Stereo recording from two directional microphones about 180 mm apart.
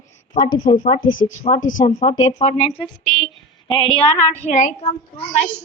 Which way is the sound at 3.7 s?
30° left (ahead or behind).